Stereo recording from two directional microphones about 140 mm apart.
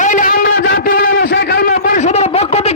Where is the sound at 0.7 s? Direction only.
90° left.